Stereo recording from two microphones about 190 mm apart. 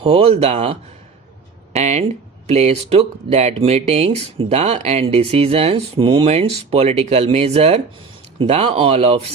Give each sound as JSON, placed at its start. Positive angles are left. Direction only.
{"t": 0.0, "sound": "speech", "side_deg": -30}